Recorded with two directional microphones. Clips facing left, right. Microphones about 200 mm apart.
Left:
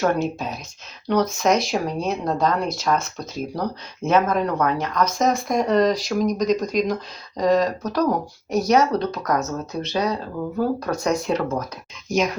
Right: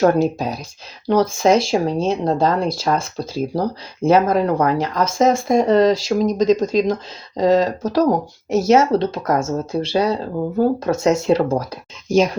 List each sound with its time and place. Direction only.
0.0 s speech: 35° right (ahead or behind)